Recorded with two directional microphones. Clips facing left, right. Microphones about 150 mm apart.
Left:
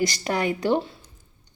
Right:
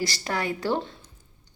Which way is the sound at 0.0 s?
20° left (ahead or behind).